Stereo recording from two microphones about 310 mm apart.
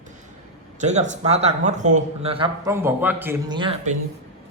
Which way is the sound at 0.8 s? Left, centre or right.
Right.